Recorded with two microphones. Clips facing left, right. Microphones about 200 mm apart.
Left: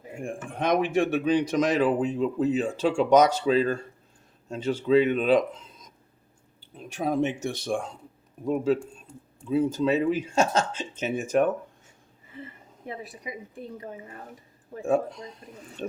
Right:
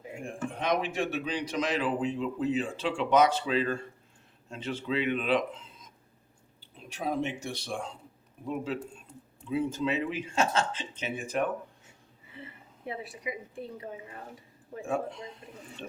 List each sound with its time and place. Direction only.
0.6 s speech: 50° left (ahead or behind)
12.4 s a sound: 45° left (ahead or behind)
14.8 s speech: 40° left (ahead or behind)